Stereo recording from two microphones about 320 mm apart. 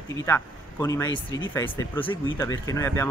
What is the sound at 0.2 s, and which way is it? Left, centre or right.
A man's voice, centre.